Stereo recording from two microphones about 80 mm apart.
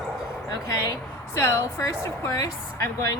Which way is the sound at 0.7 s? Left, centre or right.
Left.